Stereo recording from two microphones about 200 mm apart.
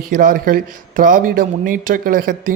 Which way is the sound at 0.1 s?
45° right (ahead or behind).